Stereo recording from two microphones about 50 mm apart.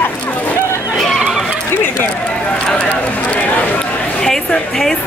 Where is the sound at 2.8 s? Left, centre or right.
Left.